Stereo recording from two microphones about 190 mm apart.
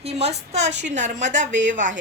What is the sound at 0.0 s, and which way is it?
A woman's voice, 35° right (ahead or behind).